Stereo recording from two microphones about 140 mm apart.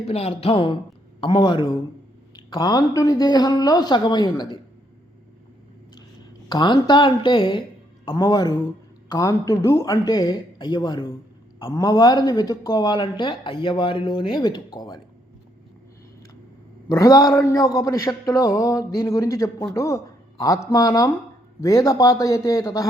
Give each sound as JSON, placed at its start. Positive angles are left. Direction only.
{"t": 0.1, "sound": "speech", "side_deg": 45}
{"t": 6.5, "sound": "speech", "side_deg": 35}
{"t": 16.9, "sound": "a man's voice", "side_deg": 25}